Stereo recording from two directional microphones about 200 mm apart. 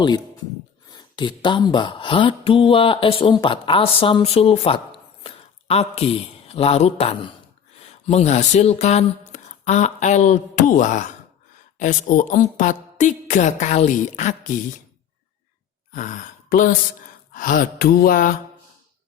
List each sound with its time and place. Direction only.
0.9 s a woman's voice: 20° left (ahead or behind); by 14.5 s 40° left (ahead or behind)
15.9 s speech: 40° left (ahead or behind)